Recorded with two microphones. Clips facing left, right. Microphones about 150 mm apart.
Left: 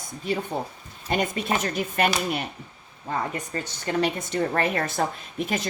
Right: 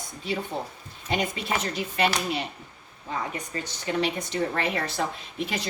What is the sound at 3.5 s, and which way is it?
A woman's voice, 45° left (ahead or behind).